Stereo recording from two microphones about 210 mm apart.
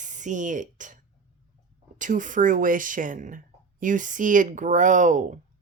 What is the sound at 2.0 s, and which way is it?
Speech, 40° right (ahead or behind).